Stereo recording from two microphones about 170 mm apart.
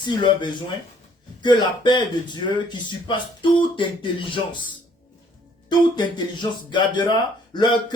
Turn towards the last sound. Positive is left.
turn(degrees=25)  # may be behind; listen again after turning